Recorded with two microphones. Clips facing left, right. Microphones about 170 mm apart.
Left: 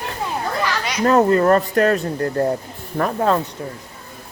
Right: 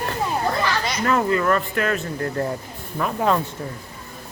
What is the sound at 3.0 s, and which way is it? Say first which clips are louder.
Speech: left 4 dB; 65° left (ahead or behind).